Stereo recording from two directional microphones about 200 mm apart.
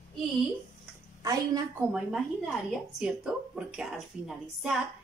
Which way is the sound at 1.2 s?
15° right (ahead or behind).